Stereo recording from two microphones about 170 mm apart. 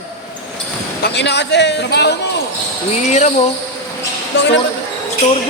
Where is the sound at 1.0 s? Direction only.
75° left (ahead or behind).